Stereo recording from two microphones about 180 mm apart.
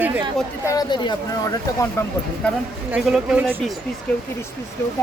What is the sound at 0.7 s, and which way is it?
Speech, 25° left (ahead or behind).